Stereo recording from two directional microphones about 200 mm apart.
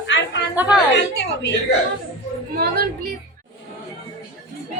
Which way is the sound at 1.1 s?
60° left (ahead or behind).